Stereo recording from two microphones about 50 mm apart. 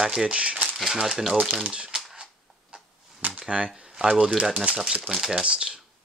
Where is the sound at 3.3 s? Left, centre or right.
Right.